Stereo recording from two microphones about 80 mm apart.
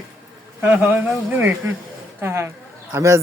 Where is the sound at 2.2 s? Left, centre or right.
Right.